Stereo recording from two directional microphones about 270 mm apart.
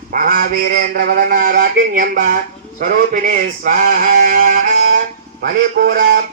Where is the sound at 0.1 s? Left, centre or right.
Right.